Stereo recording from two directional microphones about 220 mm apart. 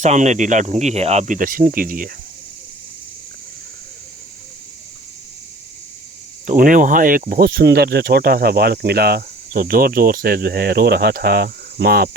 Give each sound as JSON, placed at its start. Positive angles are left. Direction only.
{"t": 0.0, "sound": "speech", "side_deg": -30}
{"t": 6.4, "sound": "speech", "side_deg": -35}